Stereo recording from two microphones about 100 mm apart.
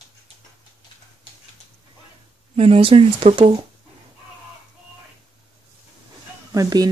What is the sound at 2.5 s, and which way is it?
Speech, 80° right.